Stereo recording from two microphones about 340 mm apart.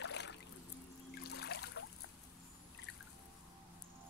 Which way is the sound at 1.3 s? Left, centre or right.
Left.